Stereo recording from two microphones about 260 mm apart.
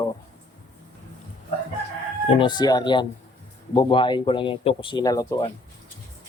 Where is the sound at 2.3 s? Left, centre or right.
Centre.